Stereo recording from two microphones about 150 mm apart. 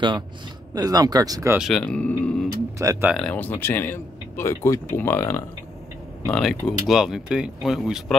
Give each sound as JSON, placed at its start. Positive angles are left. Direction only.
{"t": 0.7, "sound": "speech", "side_deg": -25}
{"t": 1.6, "sound": "speech", "side_deg": 5}
{"t": 2.8, "sound": "speech", "side_deg": -20}
{"t": 3.1, "sound": "speech", "side_deg": 5}
{"t": 6.2, "sound": "speech", "side_deg": 5}